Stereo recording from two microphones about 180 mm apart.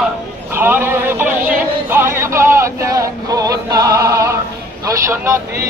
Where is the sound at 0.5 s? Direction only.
10° right (ahead or behind).